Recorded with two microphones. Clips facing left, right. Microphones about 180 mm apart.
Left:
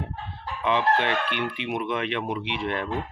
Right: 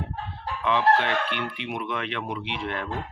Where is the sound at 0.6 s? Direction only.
20° left (ahead or behind).